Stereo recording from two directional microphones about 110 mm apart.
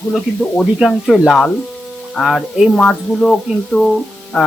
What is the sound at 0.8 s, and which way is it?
Speech, centre (ahead or behind).